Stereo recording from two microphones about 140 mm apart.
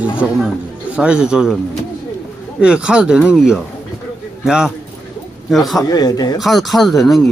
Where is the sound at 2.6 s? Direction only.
5° right (ahead or behind).